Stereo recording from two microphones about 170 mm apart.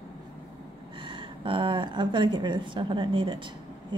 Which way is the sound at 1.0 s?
30° right (ahead or behind).